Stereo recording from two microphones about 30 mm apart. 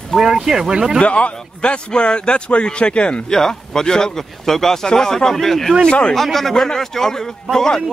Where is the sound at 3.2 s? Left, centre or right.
Centre.